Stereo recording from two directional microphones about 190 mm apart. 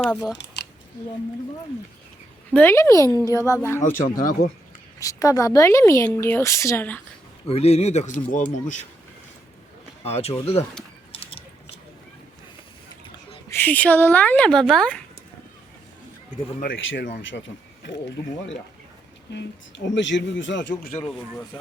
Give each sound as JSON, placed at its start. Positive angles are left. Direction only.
{"t": 0.0, "sound": "speech", "side_deg": 0}
{"t": 0.3, "sound": "a sound", "side_deg": 65}
{"t": 2.5, "sound": "speech", "side_deg": 10}
{"t": 4.2, "sound": "speech", "side_deg": 45}
{"t": 4.9, "sound": "speech", "side_deg": 15}
{"t": 7.4, "sound": "speech", "side_deg": 35}
{"t": 10.0, "sound": "speech", "side_deg": 35}
{"t": 11.1, "sound": "a sound", "side_deg": 30}
{"t": 13.5, "sound": "speech", "side_deg": 10}
{"t": 16.7, "sound": "speech", "side_deg": 85}
{"t": 17.2, "sound": "speech", "side_deg": 70}
{"t": 19.3, "sound": "speech", "side_deg": 65}